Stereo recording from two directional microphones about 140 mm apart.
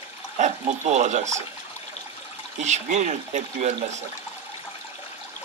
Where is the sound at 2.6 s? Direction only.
55° right (ahead or behind).